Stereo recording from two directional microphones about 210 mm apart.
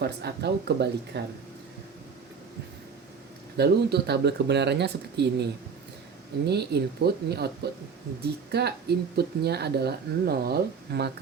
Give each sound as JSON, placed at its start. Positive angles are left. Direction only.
{"t": 0.0, "sound": "speech", "side_deg": -50}
{"t": 3.6, "sound": "speech", "side_deg": -50}